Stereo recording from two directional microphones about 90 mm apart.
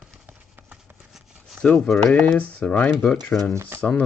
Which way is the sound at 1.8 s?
5° left (ahead or behind).